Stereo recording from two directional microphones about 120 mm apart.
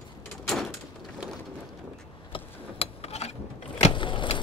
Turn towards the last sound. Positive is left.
turn(degrees=45)  # may be behind; listen again after turning